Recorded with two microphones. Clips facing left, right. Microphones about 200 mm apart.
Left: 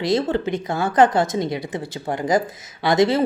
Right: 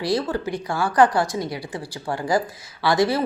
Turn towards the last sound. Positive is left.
turn(degrees=20)  # may be behind; listen again after turning